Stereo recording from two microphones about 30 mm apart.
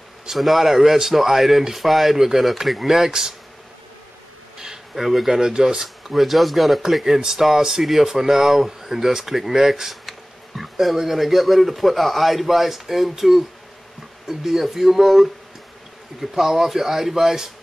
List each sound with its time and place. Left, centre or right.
0.3 s speech: centre
2.1 s speech: centre
3.1 s speech: centre
4.9 s speech: centre
5.4 s speech: right
6.1 s speech: centre